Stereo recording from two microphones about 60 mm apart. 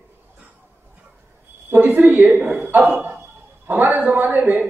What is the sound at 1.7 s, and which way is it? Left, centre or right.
Speech, right.